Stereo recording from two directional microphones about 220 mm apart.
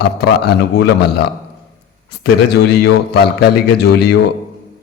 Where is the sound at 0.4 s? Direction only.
45° left (ahead or behind).